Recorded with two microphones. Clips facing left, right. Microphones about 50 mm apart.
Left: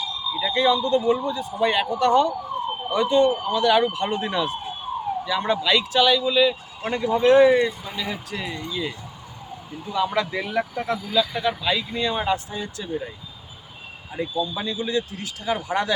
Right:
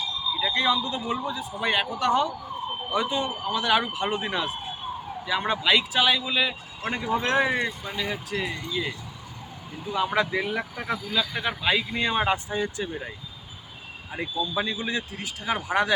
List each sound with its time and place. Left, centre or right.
0.3 s speech: centre
8.5 s speech: right
9.9 s speech: right
10.2 s speech: centre
11.4 s speech: right
14.5 s speech: right